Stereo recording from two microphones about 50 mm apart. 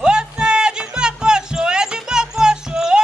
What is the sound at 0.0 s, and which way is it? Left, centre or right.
Music, centre.